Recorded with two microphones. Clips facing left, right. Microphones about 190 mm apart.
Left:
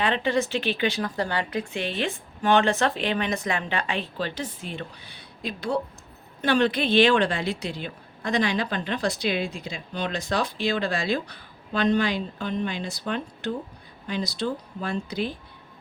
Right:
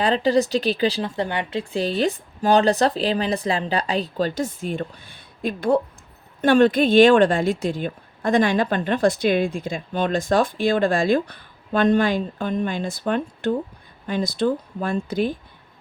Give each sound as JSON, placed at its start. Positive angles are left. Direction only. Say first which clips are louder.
{"t": 0.0, "sound": "a woman's voice", "louder": "right 5 dB", "side_deg": -35}